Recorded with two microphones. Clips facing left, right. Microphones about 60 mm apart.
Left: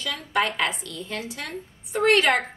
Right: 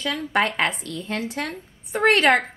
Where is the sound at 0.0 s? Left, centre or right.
Right.